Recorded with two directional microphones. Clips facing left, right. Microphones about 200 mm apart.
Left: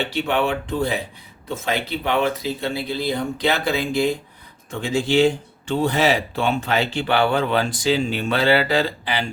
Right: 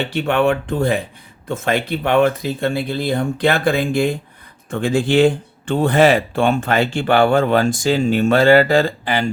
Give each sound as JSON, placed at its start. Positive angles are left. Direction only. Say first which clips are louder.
{"t": 0.1, "sound": "speech", "louder": "right 5 dB", "side_deg": -50}